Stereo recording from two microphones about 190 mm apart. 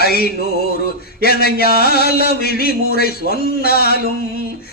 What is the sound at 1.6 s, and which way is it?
Music, 55° right (ahead or behind).